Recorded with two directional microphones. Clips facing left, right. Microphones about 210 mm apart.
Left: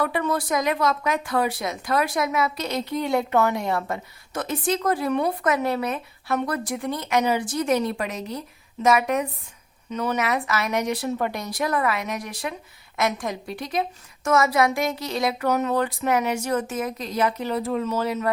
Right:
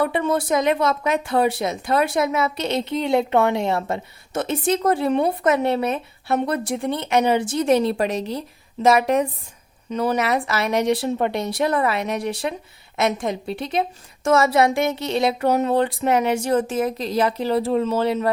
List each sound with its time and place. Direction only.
0.0 s speech: 25° right (ahead or behind)